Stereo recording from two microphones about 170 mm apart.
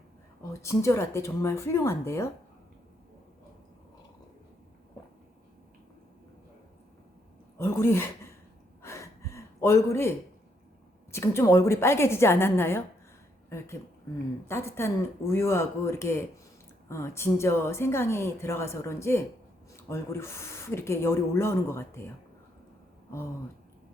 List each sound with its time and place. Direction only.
0.6 s a woman's voice: 15° left (ahead or behind)
7.6 s speech: 15° left (ahead or behind)
8.8 s gasp: 15° left (ahead or behind)
11.1 s a woman's voice: 15° left (ahead or behind)
14.4 s a woman's voice: 15° left (ahead or behind)